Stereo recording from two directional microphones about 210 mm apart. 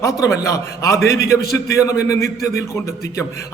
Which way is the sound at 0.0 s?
15° left (ahead or behind).